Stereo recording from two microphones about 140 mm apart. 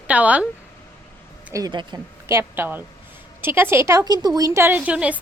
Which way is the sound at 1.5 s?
30° right (ahead or behind).